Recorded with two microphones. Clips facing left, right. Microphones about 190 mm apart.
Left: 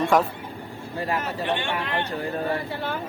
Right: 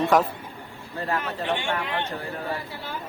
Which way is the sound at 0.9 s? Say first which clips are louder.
Left 1 dB; 15° left (ahead or behind).